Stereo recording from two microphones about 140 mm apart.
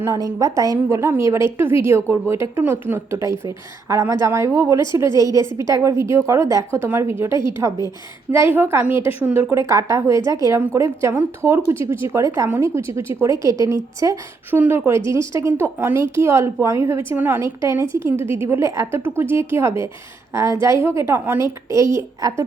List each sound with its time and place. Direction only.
0.0 s a woman's voice: 25° right (ahead or behind)